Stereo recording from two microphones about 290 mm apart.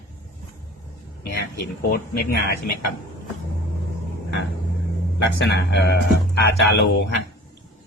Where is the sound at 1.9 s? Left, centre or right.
Left.